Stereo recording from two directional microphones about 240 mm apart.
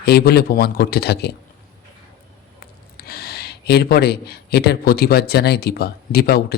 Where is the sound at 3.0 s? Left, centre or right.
Left.